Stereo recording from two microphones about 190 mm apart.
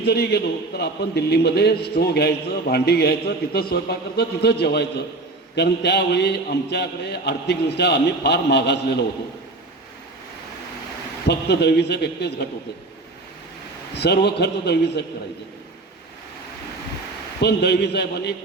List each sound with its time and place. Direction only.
0.0 s a man's voice: 60° left (ahead or behind)
11.3 s a man's voice: 60° left (ahead or behind)
13.9 s a man's voice: 60° left (ahead or behind)
17.4 s a man's voice: 60° left (ahead or behind)